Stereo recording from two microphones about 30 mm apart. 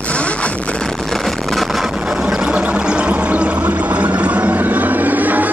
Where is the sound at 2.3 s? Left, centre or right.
Right.